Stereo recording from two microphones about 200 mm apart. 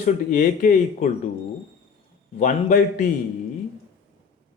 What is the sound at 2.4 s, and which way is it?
Speech, 40° left (ahead or behind).